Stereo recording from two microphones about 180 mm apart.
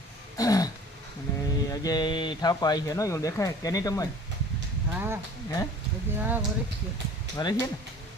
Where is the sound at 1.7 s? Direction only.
20° left (ahead or behind).